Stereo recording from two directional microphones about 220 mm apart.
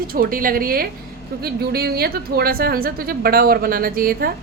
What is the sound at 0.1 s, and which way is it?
A woman's voice, 40° right (ahead or behind).